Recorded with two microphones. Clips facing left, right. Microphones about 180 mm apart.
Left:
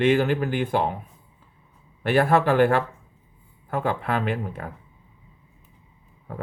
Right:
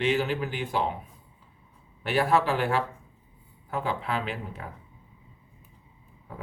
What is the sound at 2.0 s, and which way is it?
Speech, 55° left (ahead or behind).